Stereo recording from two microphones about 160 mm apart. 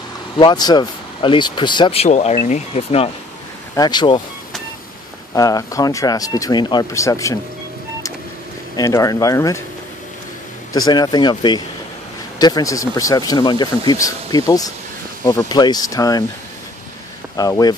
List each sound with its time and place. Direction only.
0.4 s speech: 25° left (ahead or behind)
3.7 s speech: 25° left (ahead or behind)
5.3 s speech: 20° left (ahead or behind)
8.7 s speech: 20° left (ahead or behind)
10.7 s speech: 25° left (ahead or behind)
17.4 s speech: 25° left (ahead or behind)